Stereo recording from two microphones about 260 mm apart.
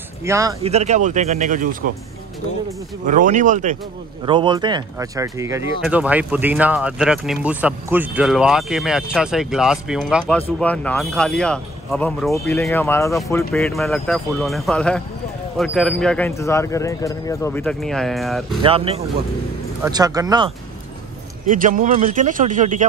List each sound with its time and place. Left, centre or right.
0.2 s speech: centre
0.7 s a man's voice: right
3.1 s a man's voice: right
4.3 s speech: centre
18.6 s a man's voice: right
21.5 s a man's voice: right